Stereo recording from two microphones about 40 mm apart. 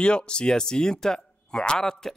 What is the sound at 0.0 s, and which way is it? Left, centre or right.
Speech, left.